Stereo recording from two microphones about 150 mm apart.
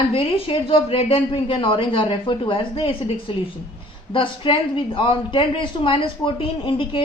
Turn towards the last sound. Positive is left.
turn(degrees=35)  # may be behind; listen again after turning